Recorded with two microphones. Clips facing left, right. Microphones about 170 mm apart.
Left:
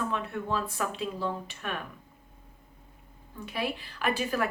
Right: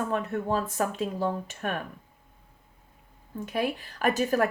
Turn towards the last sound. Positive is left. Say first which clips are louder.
# right 5 dB
turn(degrees=-45)  # may be behind; listen again after turning